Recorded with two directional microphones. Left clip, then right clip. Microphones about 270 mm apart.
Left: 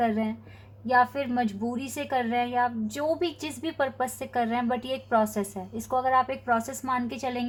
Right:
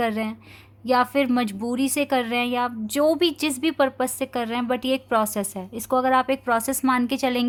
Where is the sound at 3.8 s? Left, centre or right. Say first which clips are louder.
Right 4 dB; right.